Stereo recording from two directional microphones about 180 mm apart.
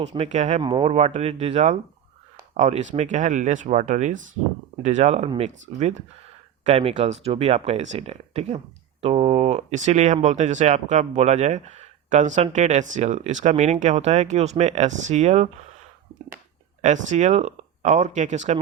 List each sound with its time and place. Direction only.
0.2 s speech: 40° right (ahead or behind)
0.6 s speech: 30° right (ahead or behind)
16.8 s speech: 40° right (ahead or behind)